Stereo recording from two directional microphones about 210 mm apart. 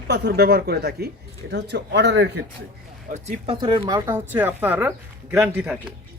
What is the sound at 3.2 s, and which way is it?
Speech, 25° right (ahead or behind).